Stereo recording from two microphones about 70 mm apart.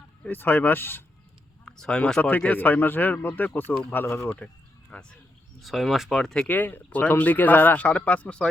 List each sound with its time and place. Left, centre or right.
0.3 s speech: left
1.6 s a sound: centre
2.0 s speech: centre
2.5 s speech: left
4.9 s speech: centre
5.6 s speech: centre
6.5 s speech: left